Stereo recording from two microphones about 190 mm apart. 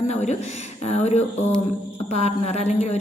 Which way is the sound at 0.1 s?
35° left (ahead or behind).